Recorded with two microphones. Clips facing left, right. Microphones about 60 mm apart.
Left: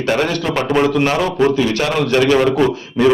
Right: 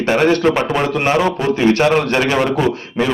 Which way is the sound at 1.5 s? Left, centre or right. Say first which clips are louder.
Right 3 dB; right.